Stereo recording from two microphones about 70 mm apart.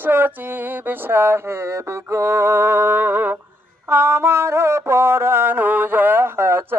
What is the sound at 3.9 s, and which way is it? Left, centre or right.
Music, right.